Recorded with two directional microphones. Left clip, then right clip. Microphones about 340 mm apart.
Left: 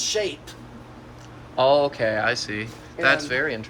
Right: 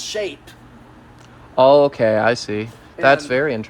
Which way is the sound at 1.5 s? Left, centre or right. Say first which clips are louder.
Right 7 dB; centre.